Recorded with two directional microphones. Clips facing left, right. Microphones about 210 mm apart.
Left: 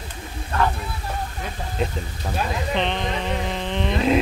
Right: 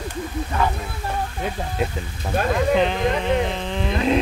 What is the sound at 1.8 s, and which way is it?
Speech, 5° right (ahead or behind).